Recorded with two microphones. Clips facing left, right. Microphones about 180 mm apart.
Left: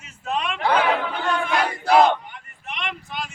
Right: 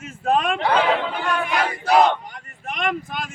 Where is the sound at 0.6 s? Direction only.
25° right (ahead or behind).